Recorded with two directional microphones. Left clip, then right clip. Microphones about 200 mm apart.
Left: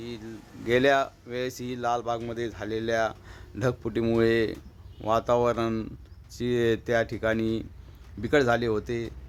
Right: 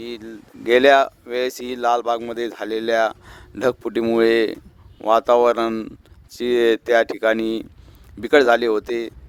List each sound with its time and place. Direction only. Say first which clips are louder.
0.0 s speech: right 7 dB; 45° right (ahead or behind)